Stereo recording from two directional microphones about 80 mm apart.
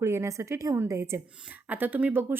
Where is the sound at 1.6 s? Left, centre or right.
Right.